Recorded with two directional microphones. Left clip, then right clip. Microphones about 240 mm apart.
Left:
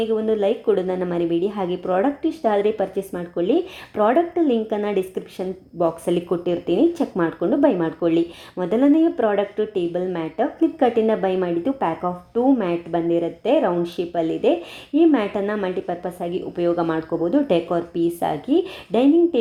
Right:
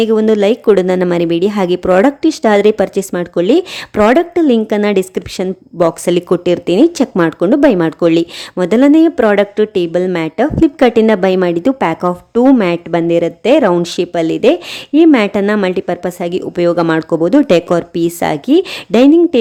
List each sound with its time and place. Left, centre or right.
0.0 s a woman's voice: right